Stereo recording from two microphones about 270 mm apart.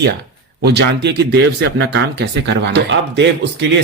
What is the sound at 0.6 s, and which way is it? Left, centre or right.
Speech, right.